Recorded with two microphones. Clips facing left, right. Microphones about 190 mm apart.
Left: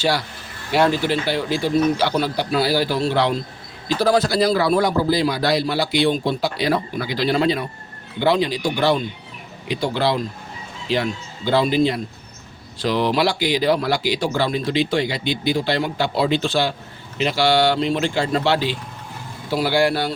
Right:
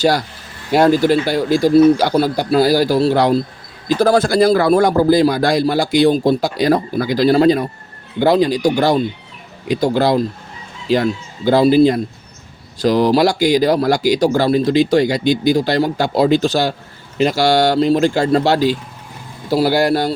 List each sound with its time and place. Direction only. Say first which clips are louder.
0.0 s speech: right 6 dB; 45° right (ahead or behind)